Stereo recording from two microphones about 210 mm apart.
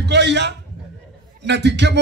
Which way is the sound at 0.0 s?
55° right (ahead or behind).